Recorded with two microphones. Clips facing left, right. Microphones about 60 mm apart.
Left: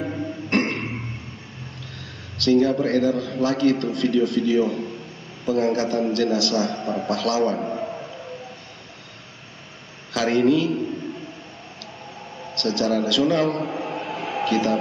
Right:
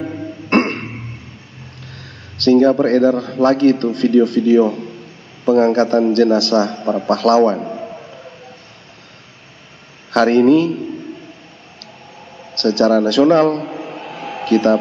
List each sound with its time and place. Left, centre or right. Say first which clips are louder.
0.5 s throat clearing: right 7 dB; right
2.0 s a man's voice: right 3 dB; right
7.5 s a sound: right 2 dB; centre
10.1 s a man's voice: right 8 dB; right
12.5 s a man's voice: right 9 dB; right
13.7 s a sound: even; centre
14.4 s speech: right 8 dB; right